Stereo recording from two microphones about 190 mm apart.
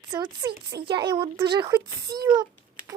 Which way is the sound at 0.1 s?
25° right (ahead or behind).